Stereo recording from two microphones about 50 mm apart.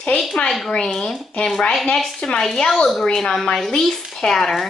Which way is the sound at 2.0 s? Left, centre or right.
Centre.